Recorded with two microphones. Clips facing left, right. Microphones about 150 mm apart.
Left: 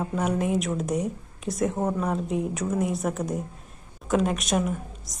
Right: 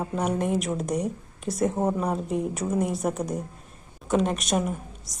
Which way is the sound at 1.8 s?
20° right (ahead or behind).